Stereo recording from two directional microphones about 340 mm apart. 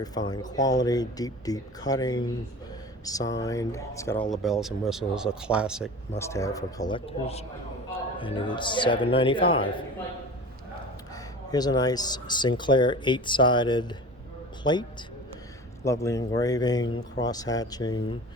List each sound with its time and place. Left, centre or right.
0.0 s speech: centre
6.1 s speech: centre
11.1 s a man's voice: centre